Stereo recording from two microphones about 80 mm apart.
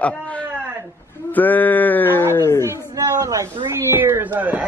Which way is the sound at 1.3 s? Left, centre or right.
Left.